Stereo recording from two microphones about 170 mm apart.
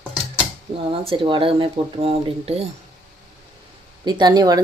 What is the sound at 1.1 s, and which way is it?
Speech, 30° right (ahead or behind).